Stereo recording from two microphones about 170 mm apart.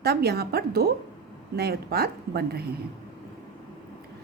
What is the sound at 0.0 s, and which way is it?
A woman's voice, 70° right (ahead or behind).